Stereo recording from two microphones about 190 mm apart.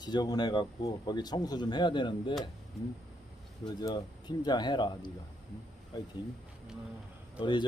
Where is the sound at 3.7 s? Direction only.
20° left (ahead or behind).